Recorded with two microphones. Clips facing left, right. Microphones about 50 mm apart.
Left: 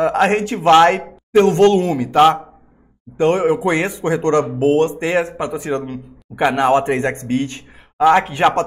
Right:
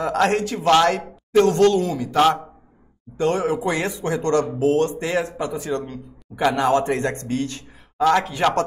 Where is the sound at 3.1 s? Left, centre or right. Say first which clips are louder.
Left 6 dB; left.